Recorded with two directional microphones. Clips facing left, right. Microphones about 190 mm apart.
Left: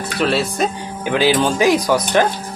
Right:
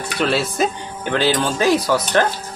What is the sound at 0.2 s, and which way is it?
Speech, centre (ahead or behind).